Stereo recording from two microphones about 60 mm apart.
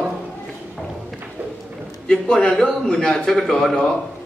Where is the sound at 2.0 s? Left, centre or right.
Centre.